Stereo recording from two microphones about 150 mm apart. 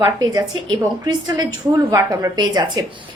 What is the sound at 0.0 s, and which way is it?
A woman's voice, 25° right (ahead or behind).